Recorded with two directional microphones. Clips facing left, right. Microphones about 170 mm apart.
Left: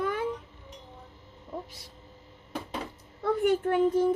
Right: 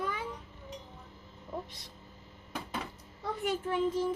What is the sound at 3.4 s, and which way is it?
Speech, 60° left (ahead or behind).